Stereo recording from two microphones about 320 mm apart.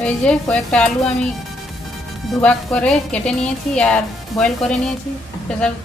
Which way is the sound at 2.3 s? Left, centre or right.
Centre.